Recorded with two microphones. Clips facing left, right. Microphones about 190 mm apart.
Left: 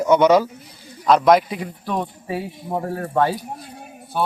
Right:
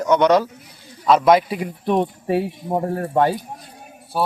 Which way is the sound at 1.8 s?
20° right (ahead or behind).